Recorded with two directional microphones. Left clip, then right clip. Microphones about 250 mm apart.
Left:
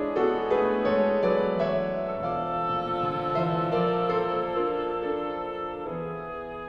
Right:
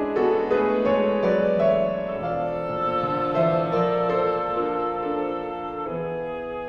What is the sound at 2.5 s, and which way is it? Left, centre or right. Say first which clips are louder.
Music: even; centre.